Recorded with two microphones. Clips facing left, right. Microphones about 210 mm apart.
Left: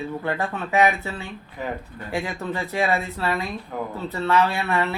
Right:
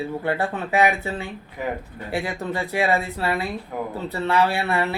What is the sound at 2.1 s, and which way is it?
Speech, 35° right (ahead or behind).